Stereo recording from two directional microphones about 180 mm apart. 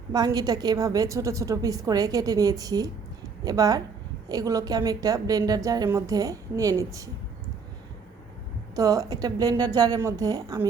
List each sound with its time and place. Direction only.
0.1 s a woman's voice: 20° right (ahead or behind)
8.7 s a woman's voice: 20° right (ahead or behind)